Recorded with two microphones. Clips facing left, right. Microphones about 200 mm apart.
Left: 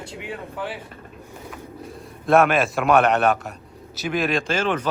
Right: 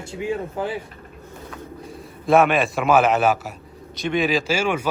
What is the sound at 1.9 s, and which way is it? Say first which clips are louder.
A man's voice: right 1 dB; centre (ahead or behind).